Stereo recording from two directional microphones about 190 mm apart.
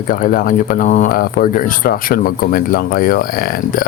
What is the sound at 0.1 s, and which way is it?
Speech, 45° left (ahead or behind).